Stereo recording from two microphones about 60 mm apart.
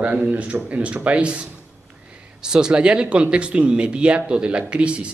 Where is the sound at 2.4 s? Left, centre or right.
Centre.